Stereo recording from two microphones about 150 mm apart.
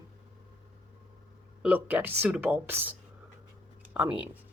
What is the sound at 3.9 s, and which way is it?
Speech, 10° right (ahead or behind).